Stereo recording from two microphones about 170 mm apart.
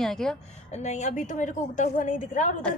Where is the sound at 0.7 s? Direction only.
45° left (ahead or behind).